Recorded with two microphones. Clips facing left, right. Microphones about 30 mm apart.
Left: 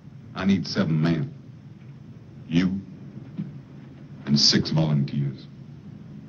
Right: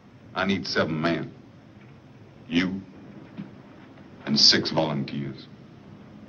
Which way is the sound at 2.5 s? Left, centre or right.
Right.